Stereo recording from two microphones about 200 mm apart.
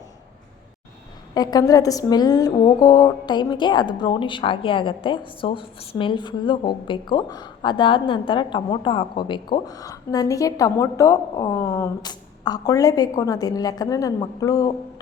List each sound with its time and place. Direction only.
1.3 s a woman's voice: 20° left (ahead or behind)